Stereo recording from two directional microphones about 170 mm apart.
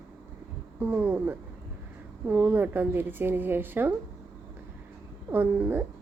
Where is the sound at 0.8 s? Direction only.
10° right (ahead or behind).